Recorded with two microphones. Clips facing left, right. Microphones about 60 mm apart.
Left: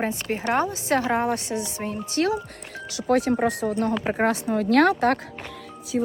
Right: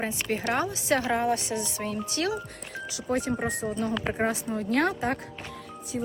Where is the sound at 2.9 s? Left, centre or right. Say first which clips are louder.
Left 7 dB; left.